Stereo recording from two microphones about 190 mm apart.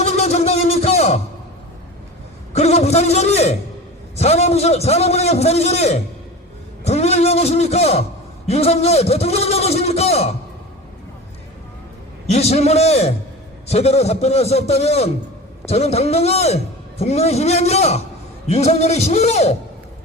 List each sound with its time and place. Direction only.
0.0 s music: 35° left (ahead or behind)
2.5 s a man's voice: 35° left (ahead or behind)
12.3 s a man's voice: 35° left (ahead or behind)